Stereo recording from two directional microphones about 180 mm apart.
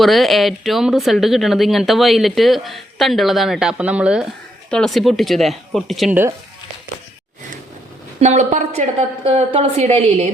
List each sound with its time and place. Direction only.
0.0 s speech: centre (ahead or behind)
8.2 s a woman's voice: 40° right (ahead or behind)